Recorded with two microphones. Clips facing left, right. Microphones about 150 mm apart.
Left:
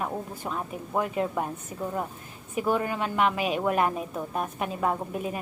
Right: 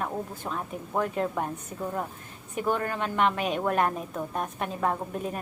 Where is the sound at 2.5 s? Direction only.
5° left (ahead or behind).